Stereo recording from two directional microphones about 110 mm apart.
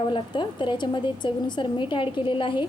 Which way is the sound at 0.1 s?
45° left (ahead or behind).